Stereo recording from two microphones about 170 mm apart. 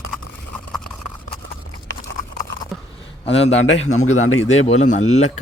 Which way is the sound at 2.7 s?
Centre (ahead or behind).